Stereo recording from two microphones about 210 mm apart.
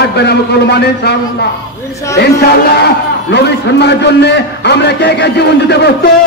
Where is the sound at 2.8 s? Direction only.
55° left (ahead or behind).